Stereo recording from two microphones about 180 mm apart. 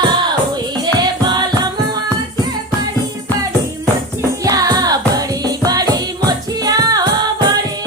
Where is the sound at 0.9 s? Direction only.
25° right (ahead or behind).